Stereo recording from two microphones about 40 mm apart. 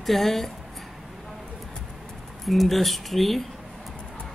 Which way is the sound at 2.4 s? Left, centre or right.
Centre.